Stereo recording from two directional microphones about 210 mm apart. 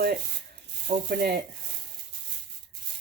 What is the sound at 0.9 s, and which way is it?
Sizzle, 35° right (ahead or behind).